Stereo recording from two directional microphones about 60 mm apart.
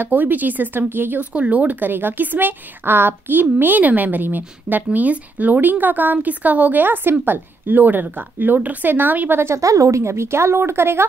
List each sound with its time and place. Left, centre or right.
0.0 s a woman's voice: right
1.3 s a woman's voice: right
9.6 s a woman's voice: right